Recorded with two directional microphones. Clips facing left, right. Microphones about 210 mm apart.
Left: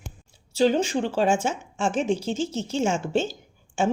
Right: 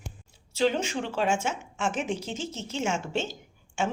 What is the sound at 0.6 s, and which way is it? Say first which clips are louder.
A woman's voice: left 5 dB; 35° left (ahead or behind).